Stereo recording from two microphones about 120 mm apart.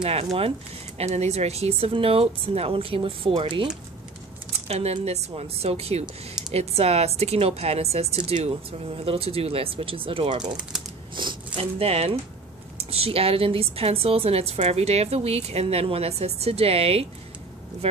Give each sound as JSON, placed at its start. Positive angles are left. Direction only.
{"t": 0.0, "sound": "a woman's voice", "side_deg": -60}
{"t": 4.6, "sound": "a woman's voice", "side_deg": -60}
{"t": 11.1, "sound": "a sound", "side_deg": -40}
{"t": 11.8, "sound": "a woman's voice", "side_deg": -55}